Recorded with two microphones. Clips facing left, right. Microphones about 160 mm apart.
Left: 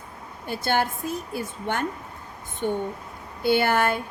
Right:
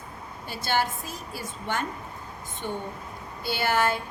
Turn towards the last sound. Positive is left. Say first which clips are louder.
# left 4 dB
turn(degrees=55)  # may be behind; listen again after turning